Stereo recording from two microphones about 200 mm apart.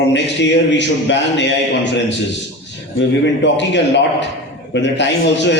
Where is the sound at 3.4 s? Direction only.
60° left (ahead or behind).